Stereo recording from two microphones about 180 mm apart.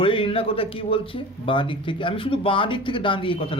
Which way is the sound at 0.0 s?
30° left (ahead or behind).